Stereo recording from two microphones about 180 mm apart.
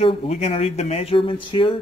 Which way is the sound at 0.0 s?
35° left (ahead or behind).